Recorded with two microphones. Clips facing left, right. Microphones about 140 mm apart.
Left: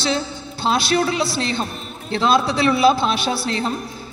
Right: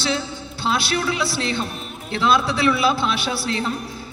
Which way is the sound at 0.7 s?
40° left (ahead or behind).